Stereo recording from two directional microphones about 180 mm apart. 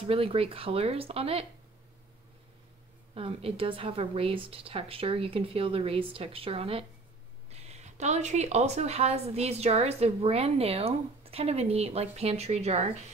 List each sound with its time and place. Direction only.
0.0 s speech: 30° right (ahead or behind)
3.2 s speech: 30° right (ahead or behind)